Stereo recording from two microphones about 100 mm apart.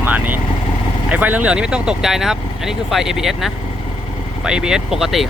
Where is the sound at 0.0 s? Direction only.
15° right (ahead or behind).